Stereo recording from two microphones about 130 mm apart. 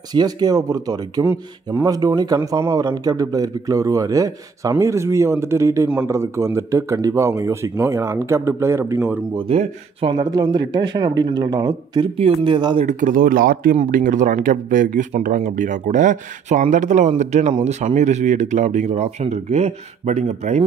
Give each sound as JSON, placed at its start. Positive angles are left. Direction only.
{"t": 0.1, "sound": "speech", "side_deg": -30}
{"t": 1.2, "sound": "a man's voice", "side_deg": -20}
{"t": 2.0, "sound": "a man's voice", "side_deg": -30}
{"t": 9.5, "sound": "speech", "side_deg": -45}
{"t": 10.2, "sound": "speech", "side_deg": -30}
{"t": 12.8, "sound": "speech", "side_deg": -90}